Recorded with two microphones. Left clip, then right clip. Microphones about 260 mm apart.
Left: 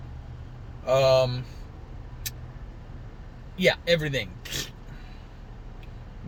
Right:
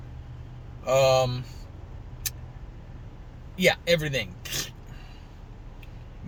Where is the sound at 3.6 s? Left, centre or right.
Centre.